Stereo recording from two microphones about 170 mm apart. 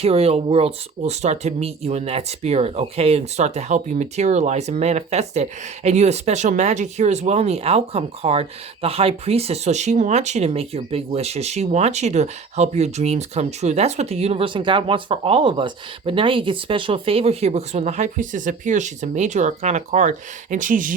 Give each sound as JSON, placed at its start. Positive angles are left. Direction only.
{"t": 0.0, "sound": "speech", "side_deg": -35}